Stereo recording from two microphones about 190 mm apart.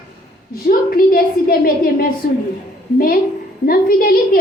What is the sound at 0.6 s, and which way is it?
A woman's voice, 50° left (ahead or behind).